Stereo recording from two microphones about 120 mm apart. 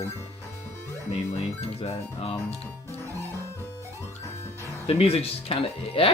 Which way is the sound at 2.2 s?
55° left (ahead or behind).